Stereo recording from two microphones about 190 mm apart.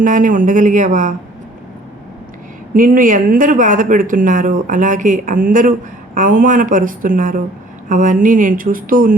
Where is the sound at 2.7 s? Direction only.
45° right (ahead or behind).